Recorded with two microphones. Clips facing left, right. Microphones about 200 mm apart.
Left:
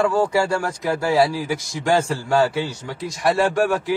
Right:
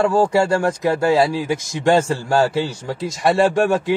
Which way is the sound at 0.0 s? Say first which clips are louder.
Right 3 dB; 25° right (ahead or behind).